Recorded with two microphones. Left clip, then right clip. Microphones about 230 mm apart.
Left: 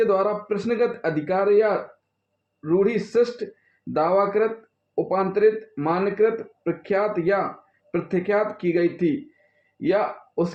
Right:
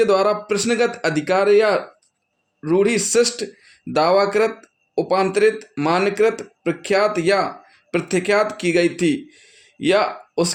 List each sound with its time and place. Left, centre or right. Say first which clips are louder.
0.0 s speech: right 4 dB; right